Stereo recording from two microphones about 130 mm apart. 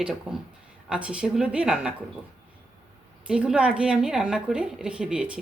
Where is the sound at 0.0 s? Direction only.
5° right (ahead or behind).